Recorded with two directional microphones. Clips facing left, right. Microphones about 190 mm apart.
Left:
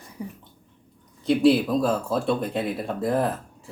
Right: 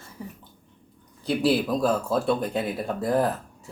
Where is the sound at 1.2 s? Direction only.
Centre (ahead or behind).